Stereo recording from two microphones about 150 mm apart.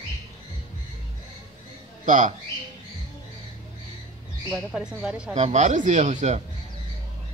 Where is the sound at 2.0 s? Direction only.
60° right (ahead or behind).